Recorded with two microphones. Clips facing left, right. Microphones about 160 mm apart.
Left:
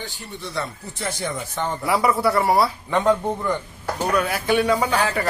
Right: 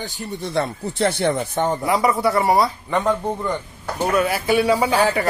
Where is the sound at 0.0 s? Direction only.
50° right (ahead or behind); by 1.6 s 65° right (ahead or behind).